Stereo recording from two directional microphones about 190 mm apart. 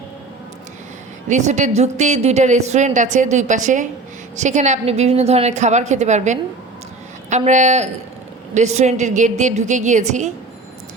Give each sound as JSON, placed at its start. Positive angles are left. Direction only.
{"t": 1.3, "sound": "a woman's voice", "side_deg": -40}